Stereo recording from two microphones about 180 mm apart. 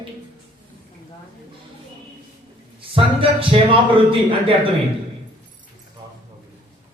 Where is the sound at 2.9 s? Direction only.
30° right (ahead or behind).